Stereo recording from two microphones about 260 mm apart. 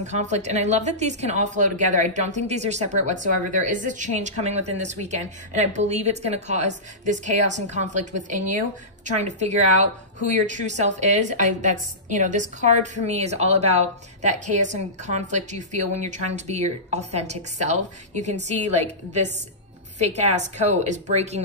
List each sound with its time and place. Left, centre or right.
0.0 s a woman's voice: right